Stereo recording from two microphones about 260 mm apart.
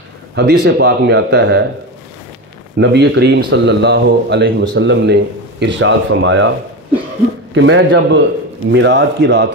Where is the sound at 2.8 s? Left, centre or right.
Right.